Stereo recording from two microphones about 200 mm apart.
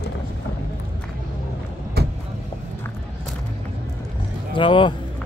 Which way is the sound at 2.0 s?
55° right (ahead or behind).